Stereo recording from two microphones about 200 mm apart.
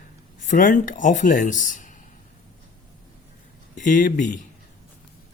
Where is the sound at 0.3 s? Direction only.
40° left (ahead or behind).